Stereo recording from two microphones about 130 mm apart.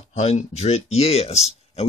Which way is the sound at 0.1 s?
55° left (ahead or behind).